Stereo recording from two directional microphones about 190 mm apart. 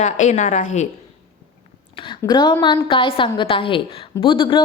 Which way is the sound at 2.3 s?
25° left (ahead or behind).